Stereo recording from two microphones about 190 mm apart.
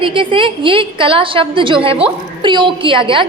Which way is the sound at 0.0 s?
25° right (ahead or behind).